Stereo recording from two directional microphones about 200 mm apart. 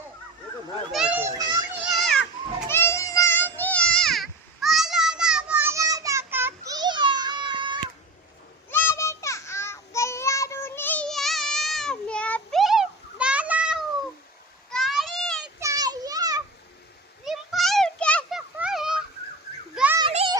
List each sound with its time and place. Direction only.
0.9 s children playing: centre (ahead or behind)
1.2 s children playing: 20° right (ahead or behind)
1.8 s children playing: centre (ahead or behind); by 7.8 s 25° right (ahead or behind)
8.7 s child singing: 10° left (ahead or behind); by 13.8 s 5° right (ahead or behind)
14.7 s a sound: centre (ahead or behind)
15.6 s children playing: 20° right (ahead or behind)
17.2 s a sound: centre (ahead or behind)
19.7 s children playing: 5° right (ahead or behind)